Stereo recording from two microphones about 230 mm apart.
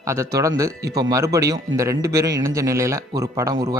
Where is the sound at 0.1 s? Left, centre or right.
Centre.